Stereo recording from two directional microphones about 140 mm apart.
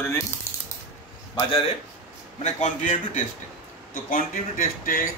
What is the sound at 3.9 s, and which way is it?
Speech, 80° left.